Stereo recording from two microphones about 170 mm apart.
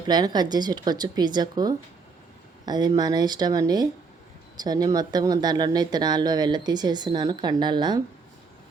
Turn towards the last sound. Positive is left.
turn(degrees=-25)  # may be behind; listen again after turning